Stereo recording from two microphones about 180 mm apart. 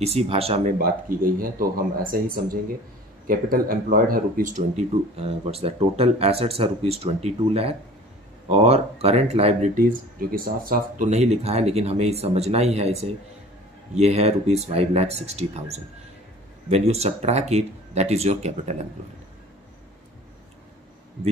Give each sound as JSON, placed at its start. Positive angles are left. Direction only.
{"t": 0.0, "sound": "speech", "side_deg": -35}
{"t": 0.7, "sound": "speech", "side_deg": -55}
{"t": 9.8, "sound": "speech", "side_deg": -50}
{"t": 11.1, "sound": "speech", "side_deg": -35}